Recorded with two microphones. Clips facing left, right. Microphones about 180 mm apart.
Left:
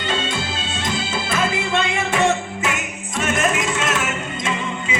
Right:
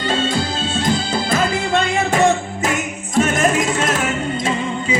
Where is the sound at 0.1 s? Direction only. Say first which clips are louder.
Right 4 dB; 40° right (ahead or behind).